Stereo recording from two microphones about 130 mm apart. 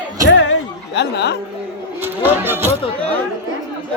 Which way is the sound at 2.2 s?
15° right (ahead or behind).